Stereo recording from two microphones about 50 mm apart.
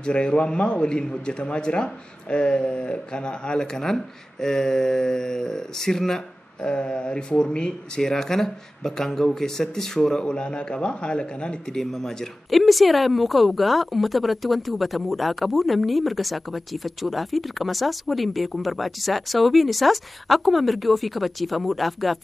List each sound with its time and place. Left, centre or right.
0.0 s a man's voice: left
11.8 s speech: centre